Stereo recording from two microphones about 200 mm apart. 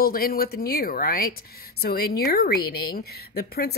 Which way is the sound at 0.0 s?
50° left (ahead or behind).